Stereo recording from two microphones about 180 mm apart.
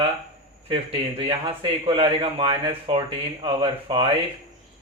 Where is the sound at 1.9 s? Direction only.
30° right (ahead or behind).